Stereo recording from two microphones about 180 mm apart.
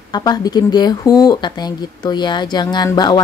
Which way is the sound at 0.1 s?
20° left (ahead or behind).